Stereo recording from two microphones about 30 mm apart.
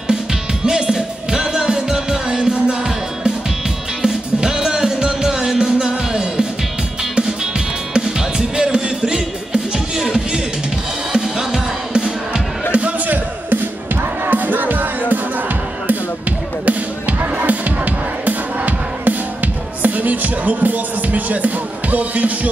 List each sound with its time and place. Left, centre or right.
0.1 s music: right
13.0 s music: right